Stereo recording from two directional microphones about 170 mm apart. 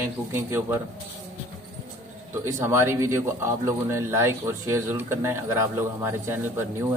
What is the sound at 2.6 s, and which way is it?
A man's voice, 15° right (ahead or behind).